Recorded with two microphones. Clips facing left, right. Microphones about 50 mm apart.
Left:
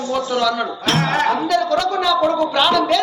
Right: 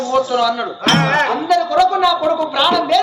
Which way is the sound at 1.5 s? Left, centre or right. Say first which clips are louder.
Right 4 dB; centre.